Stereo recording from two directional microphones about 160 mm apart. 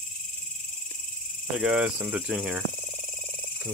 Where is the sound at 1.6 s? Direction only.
5° right (ahead or behind).